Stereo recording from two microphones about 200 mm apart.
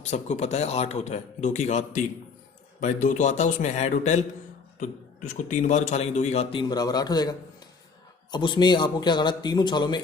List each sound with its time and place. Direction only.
0.0 s speech: 35° left (ahead or behind)
5.3 s a man's voice: 40° left (ahead or behind); by 10.0 s 20° left (ahead or behind)